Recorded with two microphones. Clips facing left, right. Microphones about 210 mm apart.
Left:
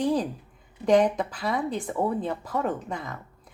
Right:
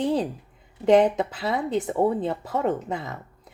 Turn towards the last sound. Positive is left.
turn(degrees=-25)  # may be behind; listen again after turning